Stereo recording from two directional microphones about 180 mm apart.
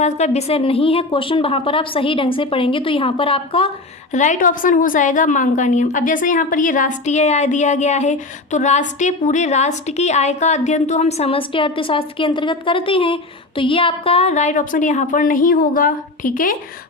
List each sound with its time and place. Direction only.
0.0 s a woman's voice: 35° left (ahead or behind)
4.1 s a woman's voice: 45° left (ahead or behind)